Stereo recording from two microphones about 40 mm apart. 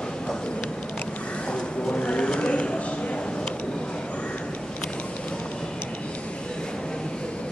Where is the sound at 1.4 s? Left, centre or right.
Left.